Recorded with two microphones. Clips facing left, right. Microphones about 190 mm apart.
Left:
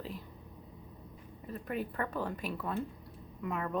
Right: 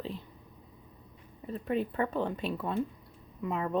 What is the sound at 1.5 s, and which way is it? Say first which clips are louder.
A woman's voice: right 6 dB; 25° right (ahead or behind).